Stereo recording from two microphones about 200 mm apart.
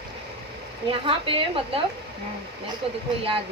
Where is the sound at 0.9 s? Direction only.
25° right (ahead or behind).